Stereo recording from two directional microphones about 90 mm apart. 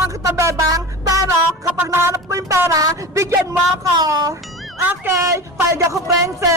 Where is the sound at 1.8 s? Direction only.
25° right (ahead or behind).